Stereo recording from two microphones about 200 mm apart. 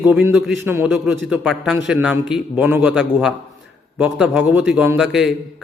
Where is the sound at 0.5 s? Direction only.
10° right (ahead or behind).